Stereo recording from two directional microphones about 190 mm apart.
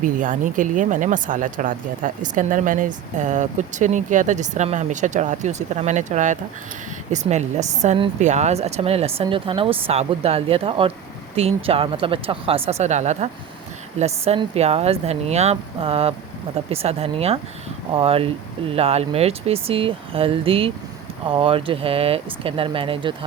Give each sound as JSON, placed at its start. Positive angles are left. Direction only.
{"t": 0.0, "sound": "speech", "side_deg": -45}